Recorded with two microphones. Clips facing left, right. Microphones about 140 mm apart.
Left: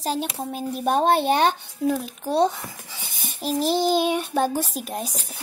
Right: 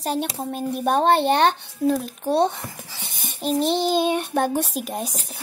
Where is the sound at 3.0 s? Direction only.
5° left (ahead or behind).